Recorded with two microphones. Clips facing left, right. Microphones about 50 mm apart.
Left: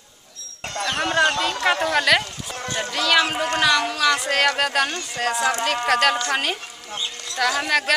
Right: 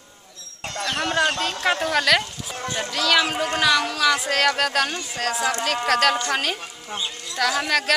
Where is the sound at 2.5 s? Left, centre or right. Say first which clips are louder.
Even; centre.